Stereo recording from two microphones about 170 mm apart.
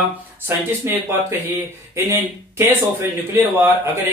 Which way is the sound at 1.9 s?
15° right (ahead or behind).